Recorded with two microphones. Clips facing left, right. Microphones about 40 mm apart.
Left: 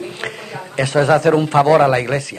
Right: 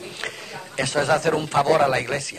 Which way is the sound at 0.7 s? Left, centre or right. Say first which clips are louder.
Left 7 dB; left.